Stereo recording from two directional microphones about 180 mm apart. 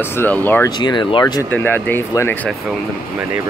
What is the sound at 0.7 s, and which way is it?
Speech, 25° left (ahead or behind).